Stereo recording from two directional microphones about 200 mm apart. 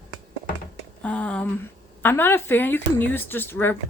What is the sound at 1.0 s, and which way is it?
Speech, 5° left (ahead or behind).